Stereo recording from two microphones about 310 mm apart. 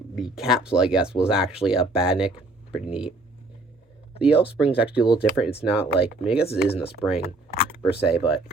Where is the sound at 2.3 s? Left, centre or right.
Centre.